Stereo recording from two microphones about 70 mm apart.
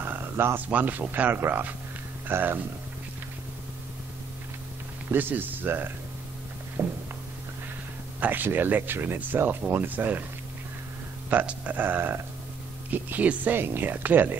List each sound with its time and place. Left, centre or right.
0.0 s a sound: right
0.7 s speech: right
5.1 s speech: right
6.8 s a sound: right
8.2 s speech: right
11.2 s speech: right